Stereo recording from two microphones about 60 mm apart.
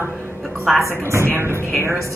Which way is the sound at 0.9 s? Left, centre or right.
Right.